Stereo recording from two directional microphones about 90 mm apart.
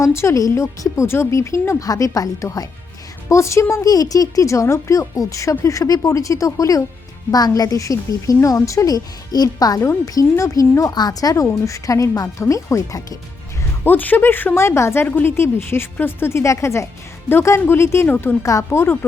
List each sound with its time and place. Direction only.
0.0 s a woman's voice: 30° left (ahead or behind)
1.9 s a woman's voice: 40° left (ahead or behind)
9.8 s a woman's voice: 35° left (ahead or behind)
13.8 s speech: 20° left (ahead or behind)